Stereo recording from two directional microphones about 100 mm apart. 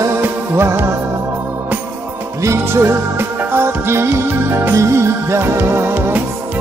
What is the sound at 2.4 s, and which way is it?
Music, 30° right (ahead or behind).